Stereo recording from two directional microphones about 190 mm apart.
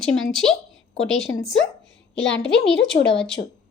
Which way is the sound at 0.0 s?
Centre (ahead or behind).